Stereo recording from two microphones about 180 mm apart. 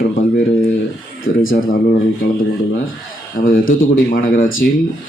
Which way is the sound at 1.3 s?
90° left.